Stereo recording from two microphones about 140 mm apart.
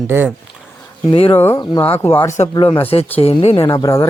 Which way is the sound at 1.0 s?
40° left (ahead or behind).